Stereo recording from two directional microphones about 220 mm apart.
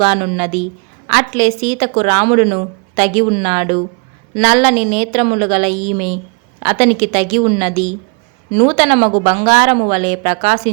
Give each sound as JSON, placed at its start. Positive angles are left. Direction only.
{"t": 0.0, "sound": "a woman's voice", "side_deg": -30}